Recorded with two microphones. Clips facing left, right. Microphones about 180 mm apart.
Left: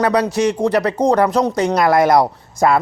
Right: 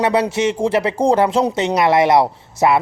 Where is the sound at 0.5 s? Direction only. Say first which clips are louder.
Left 1 dB; 25° right (ahead or behind).